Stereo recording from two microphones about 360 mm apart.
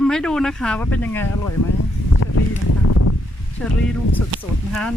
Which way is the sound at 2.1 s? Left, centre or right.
Left.